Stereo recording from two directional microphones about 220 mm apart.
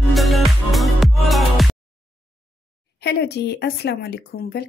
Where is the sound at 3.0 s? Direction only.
50° left (ahead or behind).